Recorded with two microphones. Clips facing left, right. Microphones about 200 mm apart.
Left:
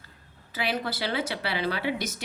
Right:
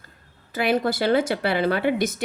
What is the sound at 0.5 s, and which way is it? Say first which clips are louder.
A woman's voice: right 8 dB; 50° right (ahead or behind).